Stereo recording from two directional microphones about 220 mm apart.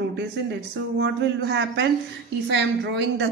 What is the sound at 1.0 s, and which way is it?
Speech, 55° right (ahead or behind).